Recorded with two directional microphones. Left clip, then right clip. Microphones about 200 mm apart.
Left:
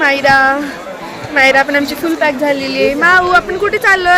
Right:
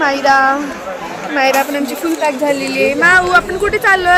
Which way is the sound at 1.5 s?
20° left (ahead or behind).